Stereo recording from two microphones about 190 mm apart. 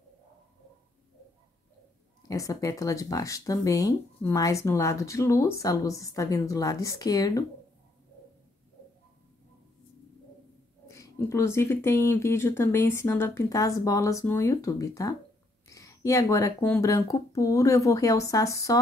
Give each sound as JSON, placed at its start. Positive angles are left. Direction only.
{"t": 2.2, "sound": "speech", "side_deg": 20}
{"t": 10.9, "sound": "speech", "side_deg": 15}